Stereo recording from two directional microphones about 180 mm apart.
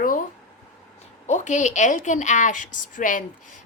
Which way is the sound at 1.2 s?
40° left (ahead or behind).